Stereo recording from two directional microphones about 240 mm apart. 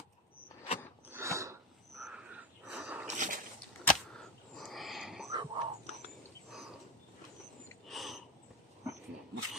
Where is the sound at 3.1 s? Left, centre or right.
Right.